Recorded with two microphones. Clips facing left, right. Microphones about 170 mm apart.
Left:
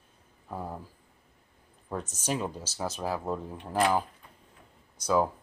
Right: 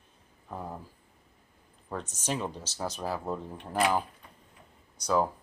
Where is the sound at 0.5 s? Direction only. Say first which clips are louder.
Left 2 dB; 5° left (ahead or behind).